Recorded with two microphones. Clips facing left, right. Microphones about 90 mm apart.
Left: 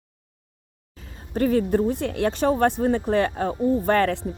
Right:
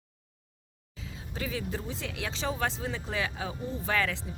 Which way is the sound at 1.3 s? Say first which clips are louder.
Left 15 dB; 50° left (ahead or behind).